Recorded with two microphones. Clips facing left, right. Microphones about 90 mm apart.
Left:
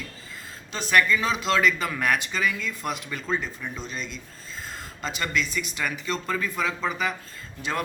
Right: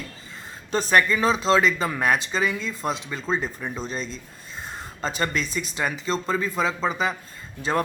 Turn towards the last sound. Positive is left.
turn(degrees=-35)  # may be behind; listen again after turning